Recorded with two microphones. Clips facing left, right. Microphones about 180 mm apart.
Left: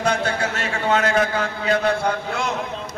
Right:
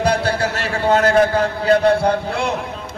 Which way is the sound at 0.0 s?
35° right (ahead or behind).